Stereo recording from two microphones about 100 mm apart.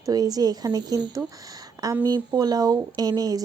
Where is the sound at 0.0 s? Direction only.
40° right (ahead or behind).